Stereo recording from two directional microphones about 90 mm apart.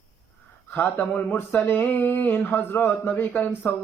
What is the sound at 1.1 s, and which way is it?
Speech, 20° left (ahead or behind).